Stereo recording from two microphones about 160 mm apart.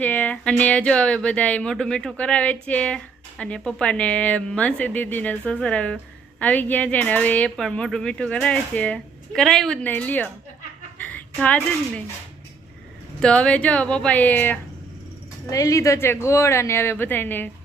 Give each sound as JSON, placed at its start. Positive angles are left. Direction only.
{"t": 0.0, "sound": "speech", "side_deg": 10}
{"t": 13.2, "sound": "speech", "side_deg": 5}
{"t": 15.4, "sound": "speech", "side_deg": 20}